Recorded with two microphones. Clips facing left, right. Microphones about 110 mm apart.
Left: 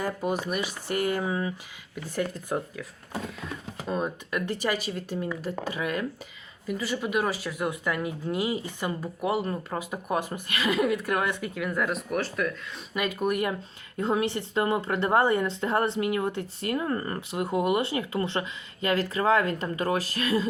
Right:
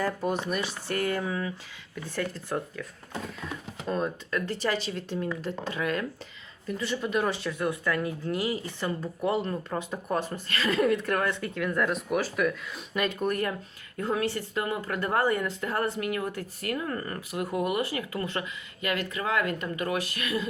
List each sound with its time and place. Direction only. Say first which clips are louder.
0.0 s speech: even; 10° left (ahead or behind)
7.6 s speech: right 1 dB; 15° left (ahead or behind); by 20.5 s 35° left (ahead or behind)